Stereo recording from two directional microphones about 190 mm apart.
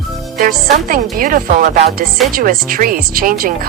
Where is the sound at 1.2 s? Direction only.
45° right (ahead or behind).